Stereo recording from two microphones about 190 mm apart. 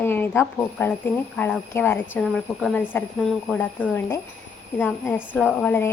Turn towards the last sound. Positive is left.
turn(degrees=10)  # may be behind; listen again after turning